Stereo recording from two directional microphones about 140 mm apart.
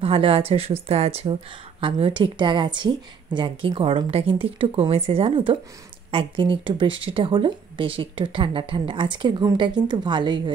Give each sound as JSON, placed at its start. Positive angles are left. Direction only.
{"t": 0.0, "sound": "a woman's voice", "side_deg": -40}